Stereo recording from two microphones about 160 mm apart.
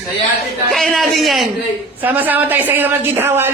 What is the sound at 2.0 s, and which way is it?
A woman's voice, 10° right (ahead or behind).